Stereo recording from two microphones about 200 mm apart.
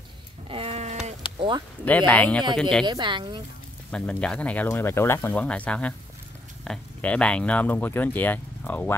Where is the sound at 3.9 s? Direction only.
5° left (ahead or behind).